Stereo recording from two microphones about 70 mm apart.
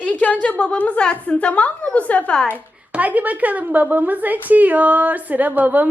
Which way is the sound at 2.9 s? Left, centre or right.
Right.